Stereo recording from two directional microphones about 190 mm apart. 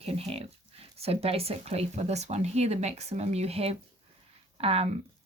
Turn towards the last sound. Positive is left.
turn(degrees=-30)  # may be behind; listen again after turning